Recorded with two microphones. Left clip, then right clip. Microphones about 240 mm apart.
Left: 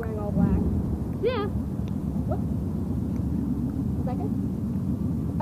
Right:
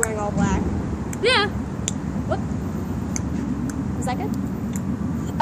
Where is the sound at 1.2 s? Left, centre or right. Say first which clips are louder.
Right 8 dB; centre.